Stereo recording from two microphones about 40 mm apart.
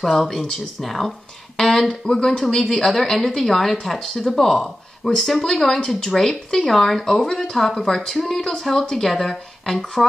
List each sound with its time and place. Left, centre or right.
0.2 s speech: centre
2.0 s speech: centre